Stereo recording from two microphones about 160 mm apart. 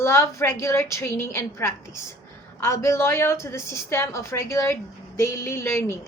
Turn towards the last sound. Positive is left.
turn(degrees=15)  # may be behind; listen again after turning